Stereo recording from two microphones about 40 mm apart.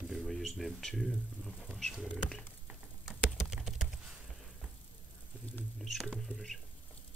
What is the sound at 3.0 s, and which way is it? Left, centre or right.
Typing, centre.